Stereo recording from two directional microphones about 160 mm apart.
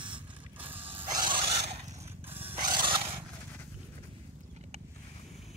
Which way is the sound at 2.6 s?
30° right (ahead or behind).